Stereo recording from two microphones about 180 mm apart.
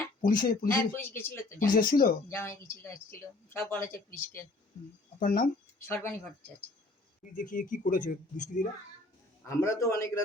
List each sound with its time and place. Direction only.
0.2 s speech: 50° left (ahead or behind)
0.7 s speech: 10° left (ahead or behind)
1.5 s speech: 50° left (ahead or behind)
2.3 s speech: 15° left (ahead or behind)
5.2 s speech: 55° left (ahead or behind)
5.8 s speech: 15° left (ahead or behind)
7.3 s speech: 45° left (ahead or behind)
9.5 s speech: 15° left (ahead or behind)